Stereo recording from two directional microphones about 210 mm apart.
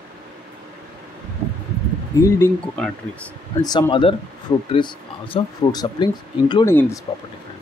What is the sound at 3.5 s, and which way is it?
Speech, 20° left (ahead or behind).